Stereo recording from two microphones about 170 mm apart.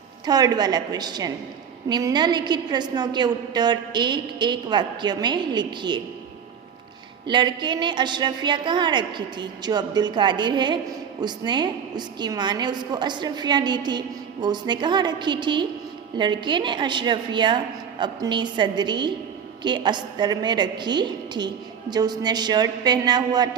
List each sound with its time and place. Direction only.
0.3 s a woman's voice: 25° right (ahead or behind)
7.3 s a woman's voice: 25° right (ahead or behind)